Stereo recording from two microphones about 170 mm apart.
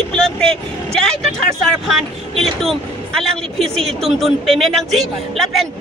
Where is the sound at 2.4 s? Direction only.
Centre (ahead or behind).